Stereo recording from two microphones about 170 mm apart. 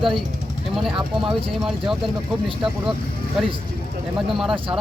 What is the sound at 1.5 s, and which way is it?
Speech, centre (ahead or behind).